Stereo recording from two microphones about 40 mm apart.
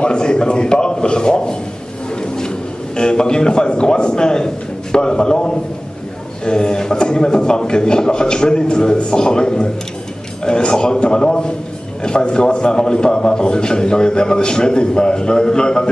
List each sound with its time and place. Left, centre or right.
0.0 s a man's voice: left
3.0 s a man's voice: left